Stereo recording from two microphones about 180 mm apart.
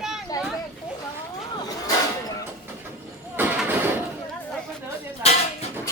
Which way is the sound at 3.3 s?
10° right (ahead or behind).